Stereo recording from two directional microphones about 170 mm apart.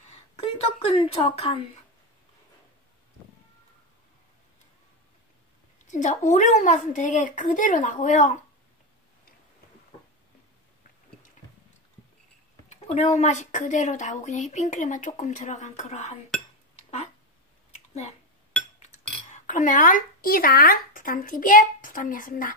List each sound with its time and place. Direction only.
0.4 s a sound: 35° left (ahead or behind)
5.9 s a woman's voice: 45° left (ahead or behind)
12.6 s a woman's voice: 40° left (ahead or behind)
19.3 s a woman's voice: 50° left (ahead or behind)